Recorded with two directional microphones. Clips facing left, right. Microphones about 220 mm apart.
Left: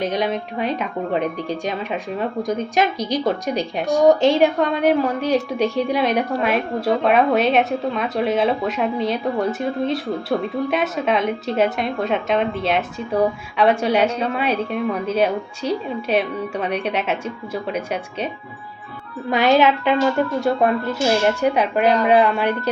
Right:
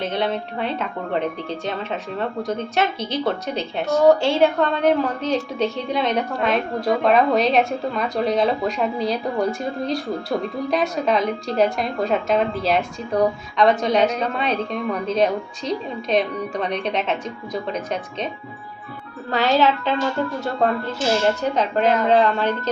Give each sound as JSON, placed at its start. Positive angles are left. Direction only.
{"t": 0.0, "sound": "a woman's voice", "side_deg": 10}
{"t": 19.3, "sound": "a woman's voice", "side_deg": 15}